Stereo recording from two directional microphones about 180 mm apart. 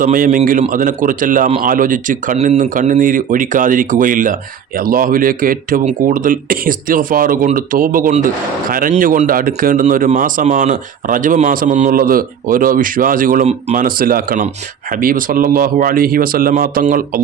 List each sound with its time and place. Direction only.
0.0 s speech: 50° right (ahead or behind)